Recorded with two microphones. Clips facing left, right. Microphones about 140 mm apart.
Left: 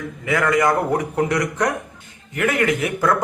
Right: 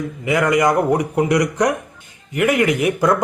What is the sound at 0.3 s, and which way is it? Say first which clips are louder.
Speech: right 2 dB; 15° right (ahead or behind).